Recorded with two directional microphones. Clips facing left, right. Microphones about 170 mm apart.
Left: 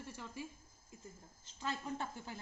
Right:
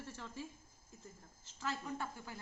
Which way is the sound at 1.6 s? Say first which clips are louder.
Left 1 dB; 20° left (ahead or behind).